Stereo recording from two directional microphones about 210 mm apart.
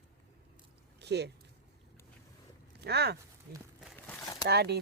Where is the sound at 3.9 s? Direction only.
10° left (ahead or behind).